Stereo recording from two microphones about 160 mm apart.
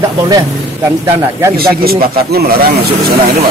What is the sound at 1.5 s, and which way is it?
Speech, 70° right (ahead or behind).